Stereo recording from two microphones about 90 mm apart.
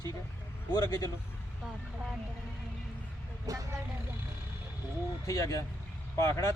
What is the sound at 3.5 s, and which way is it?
Speech, 40° right (ahead or behind).